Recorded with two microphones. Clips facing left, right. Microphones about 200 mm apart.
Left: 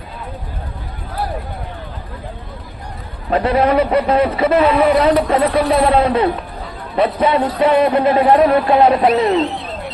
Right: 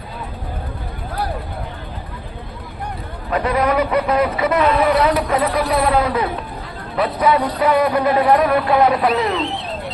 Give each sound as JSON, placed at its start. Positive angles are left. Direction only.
{"t": 3.2, "sound": "a man's voice", "side_deg": 30}